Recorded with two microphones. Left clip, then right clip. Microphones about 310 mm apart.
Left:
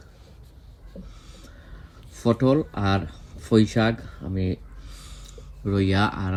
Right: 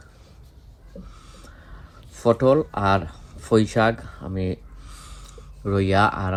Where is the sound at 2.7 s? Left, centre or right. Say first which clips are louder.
Right 5 dB; centre.